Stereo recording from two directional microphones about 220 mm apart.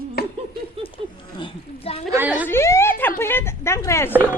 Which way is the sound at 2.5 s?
10° left (ahead or behind).